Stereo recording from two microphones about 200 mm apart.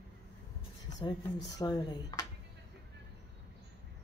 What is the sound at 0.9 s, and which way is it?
Speech, 20° left (ahead or behind).